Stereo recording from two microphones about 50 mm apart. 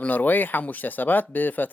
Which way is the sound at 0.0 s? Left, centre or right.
Left.